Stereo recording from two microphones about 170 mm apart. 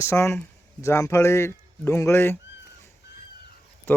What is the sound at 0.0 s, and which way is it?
Speech, 15° left (ahead or behind).